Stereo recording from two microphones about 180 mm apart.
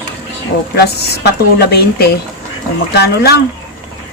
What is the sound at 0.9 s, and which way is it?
Speech, 65° left (ahead or behind).